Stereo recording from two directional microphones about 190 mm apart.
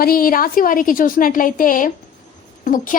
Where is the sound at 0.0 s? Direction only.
50° left (ahead or behind).